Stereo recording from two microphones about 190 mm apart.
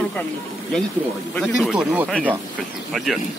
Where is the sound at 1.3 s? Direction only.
Centre (ahead or behind).